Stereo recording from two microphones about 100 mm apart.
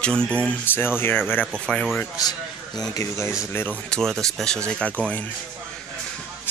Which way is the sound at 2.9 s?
30° left (ahead or behind).